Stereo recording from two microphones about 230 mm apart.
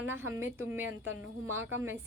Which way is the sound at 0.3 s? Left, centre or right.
Centre.